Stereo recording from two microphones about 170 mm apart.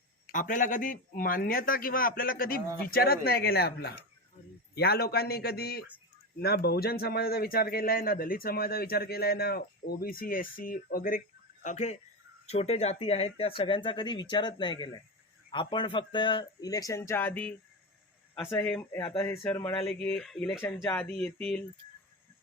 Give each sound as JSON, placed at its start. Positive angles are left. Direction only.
{"t": 0.3, "sound": "a man's voice", "side_deg": 50}
{"t": 11.6, "sound": "speech", "side_deg": 45}
{"t": 18.8, "sound": "speech", "side_deg": 20}
{"t": 19.2, "sound": "speech", "side_deg": 10}